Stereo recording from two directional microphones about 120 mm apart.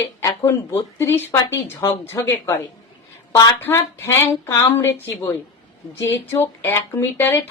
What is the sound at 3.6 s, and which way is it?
Speech, 20° left (ahead or behind).